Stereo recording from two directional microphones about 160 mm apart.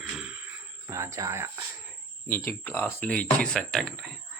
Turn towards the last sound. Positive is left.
turn(degrees=0)  # may be behind; listen again after turning